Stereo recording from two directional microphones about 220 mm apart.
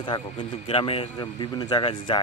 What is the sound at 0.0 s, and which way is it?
Speech, 20° left (ahead or behind).